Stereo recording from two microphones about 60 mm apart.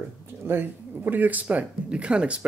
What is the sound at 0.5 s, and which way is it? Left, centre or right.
Speech, right.